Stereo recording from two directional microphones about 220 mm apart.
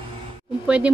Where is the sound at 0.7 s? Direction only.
5° right (ahead or behind).